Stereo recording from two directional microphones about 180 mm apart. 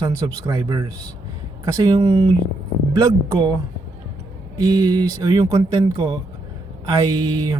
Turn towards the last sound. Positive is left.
turn(degrees=-25)  # may be behind; listen again after turning